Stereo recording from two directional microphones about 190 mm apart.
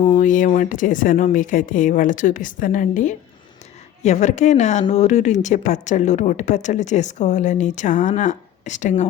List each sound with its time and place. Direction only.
0.1 s speech: 45° left (ahead or behind)